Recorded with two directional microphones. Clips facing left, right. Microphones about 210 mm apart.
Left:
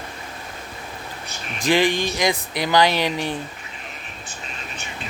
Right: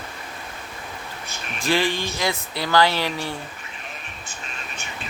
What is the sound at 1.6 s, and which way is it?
Speech, 15° left (ahead or behind).